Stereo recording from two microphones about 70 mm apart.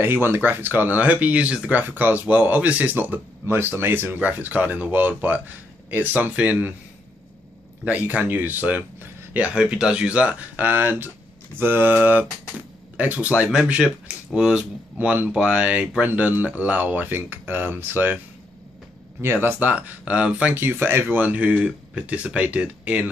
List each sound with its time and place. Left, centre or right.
0.0 s speech: right
7.8 s speech: right
19.2 s speech: right